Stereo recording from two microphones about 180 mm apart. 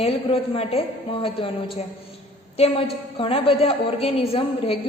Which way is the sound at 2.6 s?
30° left (ahead or behind).